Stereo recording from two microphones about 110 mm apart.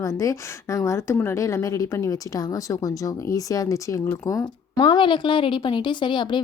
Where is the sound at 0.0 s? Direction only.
30° left (ahead or behind).